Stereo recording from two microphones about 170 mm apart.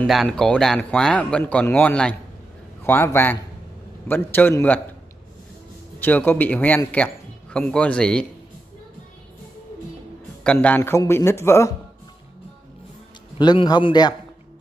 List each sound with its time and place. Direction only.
0.0 s speech: centre (ahead or behind)
5.9 s speech: 10° left (ahead or behind)
10.4 s speech: 5° left (ahead or behind)
13.4 s a man's voice: 25° left (ahead or behind)